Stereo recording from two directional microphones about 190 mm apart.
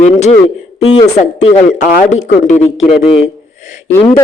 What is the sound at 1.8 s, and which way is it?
Speech, 45° left (ahead or behind).